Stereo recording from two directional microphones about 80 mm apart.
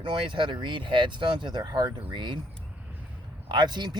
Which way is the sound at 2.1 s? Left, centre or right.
Right.